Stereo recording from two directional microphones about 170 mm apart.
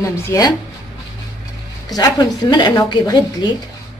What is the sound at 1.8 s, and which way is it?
A woman's voice, 25° left (ahead or behind).